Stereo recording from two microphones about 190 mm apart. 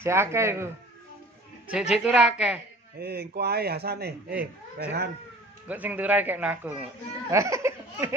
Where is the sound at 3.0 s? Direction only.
55° right (ahead or behind).